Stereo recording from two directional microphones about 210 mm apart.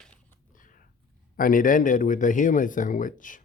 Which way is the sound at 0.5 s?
40° left (ahead or behind).